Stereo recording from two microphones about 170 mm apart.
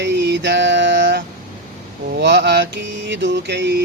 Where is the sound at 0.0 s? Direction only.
85° right.